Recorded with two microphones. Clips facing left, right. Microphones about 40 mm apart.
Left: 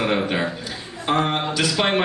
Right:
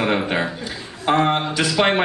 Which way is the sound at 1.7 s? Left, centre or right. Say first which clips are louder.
Right 4 dB; centre.